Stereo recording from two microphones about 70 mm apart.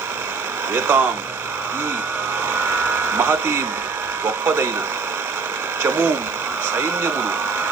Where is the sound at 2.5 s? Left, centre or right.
Right.